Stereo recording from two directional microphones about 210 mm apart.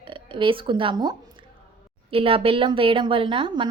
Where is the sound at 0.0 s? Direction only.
25° right (ahead or behind).